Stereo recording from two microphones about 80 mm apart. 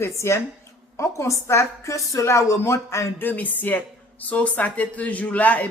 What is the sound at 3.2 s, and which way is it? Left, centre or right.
Speech, left.